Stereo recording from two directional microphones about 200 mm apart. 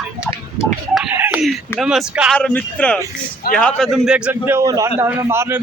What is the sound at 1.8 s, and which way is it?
Speech, 5° right (ahead or behind).